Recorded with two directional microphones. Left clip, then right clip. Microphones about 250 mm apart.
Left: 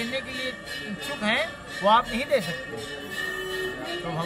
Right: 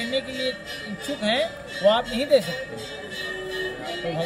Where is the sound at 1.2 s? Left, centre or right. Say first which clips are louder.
Right 2 dB; centre.